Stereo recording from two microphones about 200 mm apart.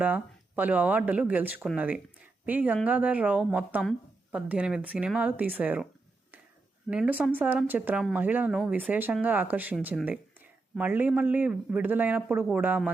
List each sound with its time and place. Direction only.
0.0 s a woman's voice: 10° right (ahead or behind)
6.9 s a woman's voice: 5° right (ahead or behind)